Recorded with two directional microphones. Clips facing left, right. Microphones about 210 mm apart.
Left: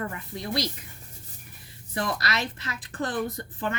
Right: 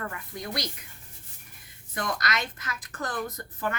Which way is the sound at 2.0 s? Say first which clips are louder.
Left 2 dB; 30° left (ahead or behind).